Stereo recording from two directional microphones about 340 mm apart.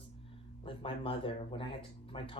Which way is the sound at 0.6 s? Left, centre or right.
Centre.